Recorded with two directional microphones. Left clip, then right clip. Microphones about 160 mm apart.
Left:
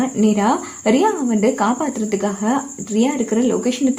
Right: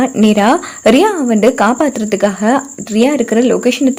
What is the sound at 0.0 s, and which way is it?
Speech, 40° right (ahead or behind).